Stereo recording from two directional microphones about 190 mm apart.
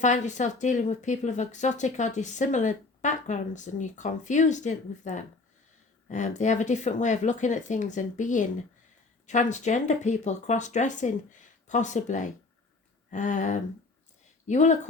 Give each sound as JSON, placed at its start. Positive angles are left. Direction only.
{"t": 0.0, "sound": "speech", "side_deg": 40}